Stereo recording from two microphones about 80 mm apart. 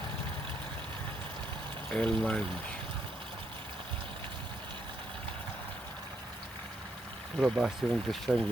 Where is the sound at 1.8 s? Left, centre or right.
Centre.